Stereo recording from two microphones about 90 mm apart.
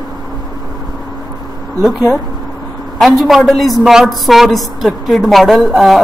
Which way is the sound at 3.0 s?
Centre (ahead or behind).